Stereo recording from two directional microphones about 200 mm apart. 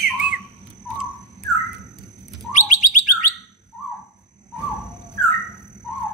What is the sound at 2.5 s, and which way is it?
Bird, 40° left (ahead or behind).